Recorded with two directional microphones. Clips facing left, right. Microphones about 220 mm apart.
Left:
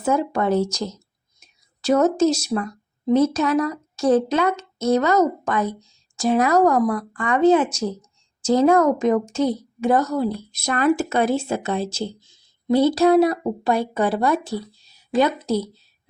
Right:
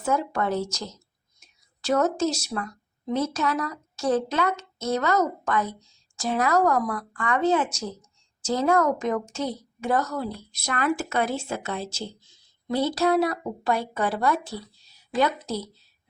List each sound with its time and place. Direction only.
0.0 s speech: 20° left (ahead or behind)
1.9 s speech: 15° left (ahead or behind)